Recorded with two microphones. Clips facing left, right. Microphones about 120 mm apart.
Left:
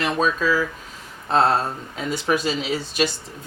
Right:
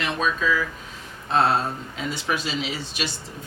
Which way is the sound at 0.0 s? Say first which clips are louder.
Left 3 dB; 40° left (ahead or behind).